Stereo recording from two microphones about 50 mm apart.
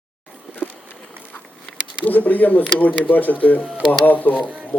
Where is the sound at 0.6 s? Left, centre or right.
Centre.